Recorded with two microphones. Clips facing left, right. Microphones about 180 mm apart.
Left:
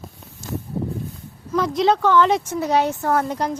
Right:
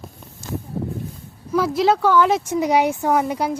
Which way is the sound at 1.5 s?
5° right (ahead or behind).